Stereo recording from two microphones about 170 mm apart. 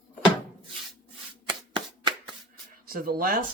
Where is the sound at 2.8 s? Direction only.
55° right (ahead or behind).